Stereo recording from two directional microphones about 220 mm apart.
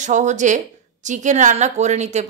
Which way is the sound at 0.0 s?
35° right (ahead or behind).